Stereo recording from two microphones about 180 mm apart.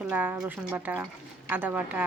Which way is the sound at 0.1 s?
10° right (ahead or behind).